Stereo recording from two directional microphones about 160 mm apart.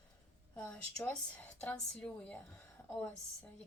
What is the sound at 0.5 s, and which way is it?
A woman's voice, 10° left (ahead or behind).